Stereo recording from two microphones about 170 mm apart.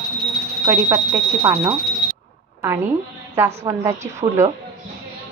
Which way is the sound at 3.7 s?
15° right (ahead or behind).